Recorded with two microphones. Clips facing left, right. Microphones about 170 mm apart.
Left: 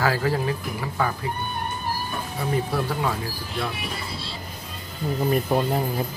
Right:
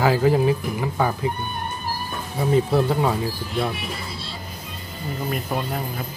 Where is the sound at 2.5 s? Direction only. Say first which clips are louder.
Right 7 dB; 25° right (ahead or behind).